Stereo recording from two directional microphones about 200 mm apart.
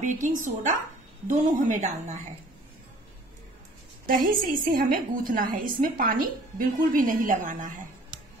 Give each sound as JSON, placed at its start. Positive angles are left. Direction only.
{"t": 0.0, "sound": "speech", "side_deg": -40}
{"t": 4.0, "sound": "a woman's voice", "side_deg": -45}